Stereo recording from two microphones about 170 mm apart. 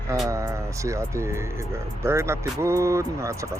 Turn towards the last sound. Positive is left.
turn(degrees=-15)  # may be behind; listen again after turning